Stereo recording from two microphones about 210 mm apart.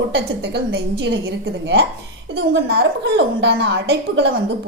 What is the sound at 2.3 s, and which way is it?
A woman's voice, 55° right (ahead or behind).